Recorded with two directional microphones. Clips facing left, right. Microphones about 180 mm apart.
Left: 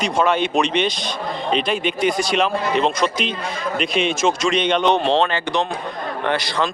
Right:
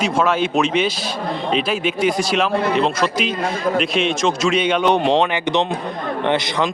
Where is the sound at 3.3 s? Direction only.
50° right (ahead or behind).